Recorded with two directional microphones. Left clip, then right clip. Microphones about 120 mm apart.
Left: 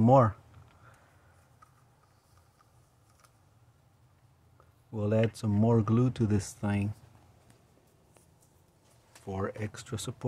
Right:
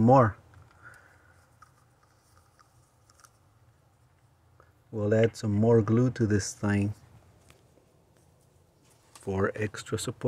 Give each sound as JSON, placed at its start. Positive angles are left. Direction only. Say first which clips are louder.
{"t": 0.0, "sound": "speech", "louder": "right 2 dB", "side_deg": 0}
{"t": 4.9, "sound": "speech", "louder": "right 4 dB", "side_deg": 5}
{"t": 6.6, "sound": "speech", "louder": "right 5 dB", "side_deg": -25}
{"t": 9.2, "sound": "speech", "louder": "right 7 dB", "side_deg": -35}